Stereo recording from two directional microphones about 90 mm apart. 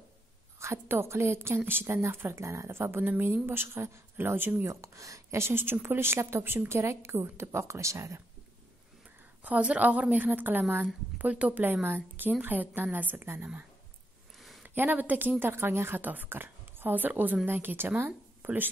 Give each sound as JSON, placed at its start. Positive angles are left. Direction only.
{"t": 0.6, "sound": "a woman's voice", "side_deg": -30}
{"t": 4.6, "sound": "a woman's voice", "side_deg": -35}
{"t": 9.0, "sound": "a woman's voice", "side_deg": -15}
{"t": 14.6, "sound": "a woman's voice", "side_deg": -20}